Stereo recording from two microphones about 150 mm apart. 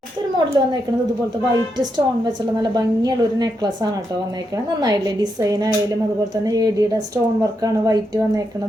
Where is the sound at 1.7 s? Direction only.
30° right (ahead or behind).